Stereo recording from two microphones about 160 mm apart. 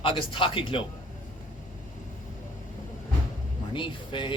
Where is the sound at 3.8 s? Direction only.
30° left (ahead or behind).